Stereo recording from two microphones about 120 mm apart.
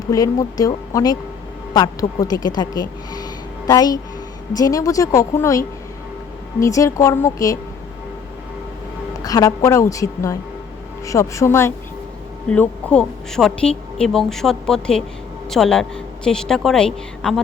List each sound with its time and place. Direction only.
0.1 s a woman's voice: 30° left (ahead or behind)
9.2 s a woman's voice: 30° left (ahead or behind)
12.5 s a woman's voice: 10° left (ahead or behind)